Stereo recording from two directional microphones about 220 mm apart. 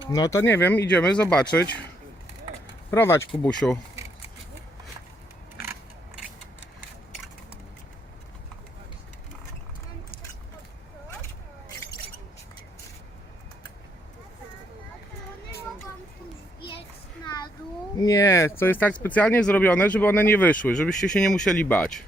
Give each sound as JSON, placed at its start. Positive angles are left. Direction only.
{"t": 0.1, "sound": "speech", "side_deg": 15}
{"t": 2.9, "sound": "speech", "side_deg": 10}
{"t": 16.6, "sound": "a sound", "side_deg": 20}
{"t": 18.0, "sound": "speech", "side_deg": 15}